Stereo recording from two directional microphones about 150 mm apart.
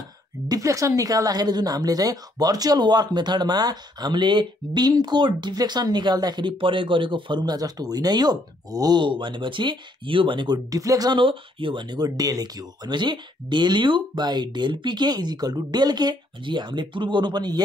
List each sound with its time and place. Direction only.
0.5 s a woman's voice: 20° right (ahead or behind)